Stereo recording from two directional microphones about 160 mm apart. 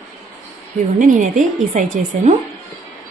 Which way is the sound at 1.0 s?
50° right (ahead or behind).